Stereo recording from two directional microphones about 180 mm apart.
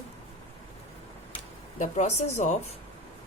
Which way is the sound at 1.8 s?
40° left (ahead or behind).